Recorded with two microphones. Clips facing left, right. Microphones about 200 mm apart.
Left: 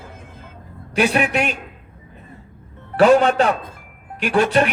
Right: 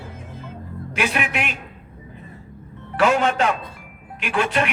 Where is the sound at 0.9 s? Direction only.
35° left (ahead or behind).